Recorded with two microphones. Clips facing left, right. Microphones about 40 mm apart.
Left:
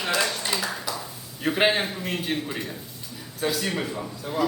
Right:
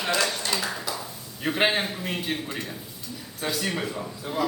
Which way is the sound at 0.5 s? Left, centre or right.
Centre.